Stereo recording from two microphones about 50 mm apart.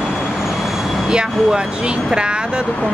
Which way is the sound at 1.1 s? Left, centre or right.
Centre.